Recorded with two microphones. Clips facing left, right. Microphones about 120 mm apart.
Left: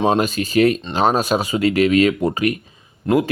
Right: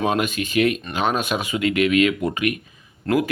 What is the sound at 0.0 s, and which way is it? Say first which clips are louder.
Speech: left 4 dB; 30° left (ahead or behind).